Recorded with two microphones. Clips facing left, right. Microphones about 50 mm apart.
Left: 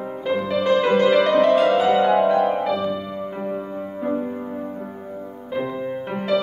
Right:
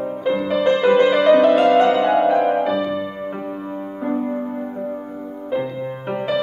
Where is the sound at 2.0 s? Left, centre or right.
Centre.